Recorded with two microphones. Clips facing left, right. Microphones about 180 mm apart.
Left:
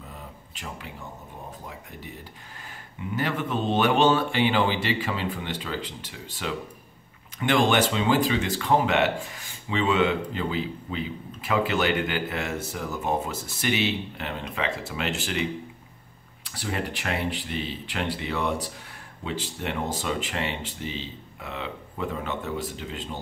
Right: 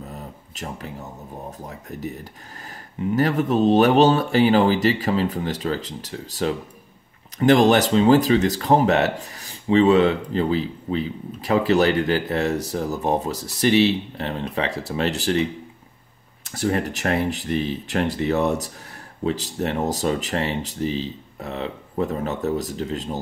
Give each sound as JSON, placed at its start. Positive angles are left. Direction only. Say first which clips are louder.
{"t": 0.1, "sound": "a sound", "louder": "right 6 dB", "side_deg": -40}
{"t": 1.7, "sound": "speech", "louder": "right 9 dB", "side_deg": -45}
{"t": 16.4, "sound": "speech", "louder": "right 8 dB", "side_deg": -45}